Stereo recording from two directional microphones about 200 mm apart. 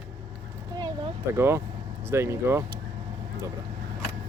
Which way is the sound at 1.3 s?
15° right (ahead or behind).